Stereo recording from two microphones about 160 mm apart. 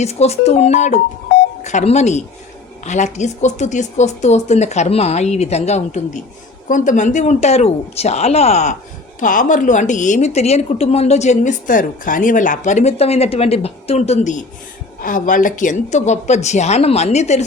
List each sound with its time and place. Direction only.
0.0 s speech: 40° left (ahead or behind)
9.2 s speech: 55° left (ahead or behind)